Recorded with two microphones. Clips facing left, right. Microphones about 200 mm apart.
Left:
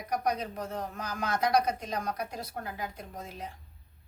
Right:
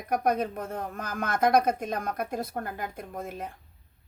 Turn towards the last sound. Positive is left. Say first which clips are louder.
# right 5 dB
turn(degrees=-55)  # may be behind; listen again after turning